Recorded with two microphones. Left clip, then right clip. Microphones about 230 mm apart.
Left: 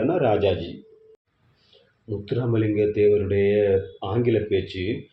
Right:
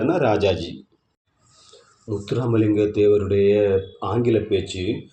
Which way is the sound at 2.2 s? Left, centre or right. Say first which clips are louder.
Right 3 dB; right.